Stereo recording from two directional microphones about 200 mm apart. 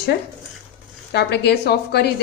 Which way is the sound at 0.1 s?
50° left (ahead or behind).